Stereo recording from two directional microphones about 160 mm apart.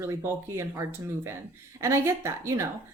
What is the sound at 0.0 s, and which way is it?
A woman's voice, 15° right (ahead or behind).